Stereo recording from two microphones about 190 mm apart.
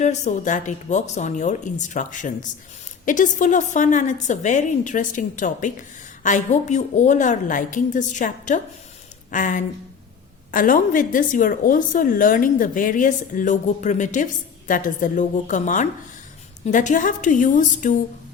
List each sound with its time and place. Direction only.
0.0 s a woman's voice: 40° left (ahead or behind)